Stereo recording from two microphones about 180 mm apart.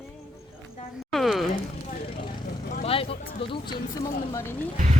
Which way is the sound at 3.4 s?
25° left (ahead or behind).